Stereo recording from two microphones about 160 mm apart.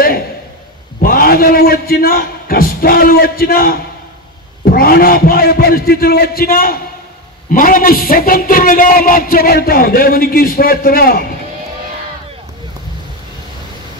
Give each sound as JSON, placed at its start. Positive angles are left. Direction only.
{"t": 1.0, "sound": "a man's voice", "side_deg": 65}